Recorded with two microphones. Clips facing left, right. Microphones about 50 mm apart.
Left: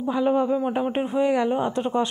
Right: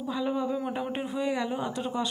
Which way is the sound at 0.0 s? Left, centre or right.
Left.